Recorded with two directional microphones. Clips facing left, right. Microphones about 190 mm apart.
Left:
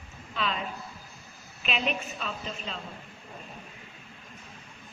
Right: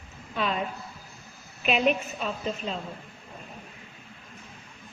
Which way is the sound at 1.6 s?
50° right (ahead or behind).